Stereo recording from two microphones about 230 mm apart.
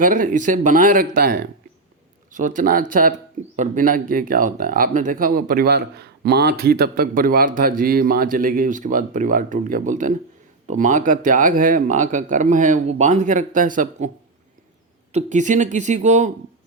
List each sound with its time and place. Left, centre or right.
0.0 s speech: right
15.1 s speech: right